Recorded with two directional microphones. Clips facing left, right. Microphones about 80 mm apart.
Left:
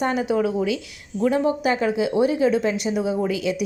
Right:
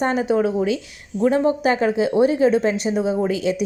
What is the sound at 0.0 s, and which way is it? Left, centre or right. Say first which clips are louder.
A woman's voice: right 2 dB; right.